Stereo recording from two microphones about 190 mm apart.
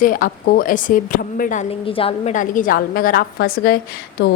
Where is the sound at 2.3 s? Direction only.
45° left (ahead or behind).